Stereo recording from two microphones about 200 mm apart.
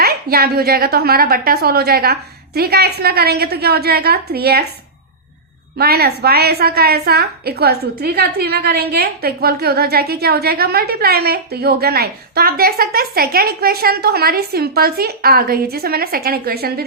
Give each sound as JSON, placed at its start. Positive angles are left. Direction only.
{"t": 0.0, "sound": "a woman's voice", "side_deg": -50}
{"t": 5.7, "sound": "a woman's voice", "side_deg": -50}